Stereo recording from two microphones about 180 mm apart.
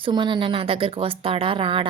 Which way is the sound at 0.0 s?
25° right (ahead or behind).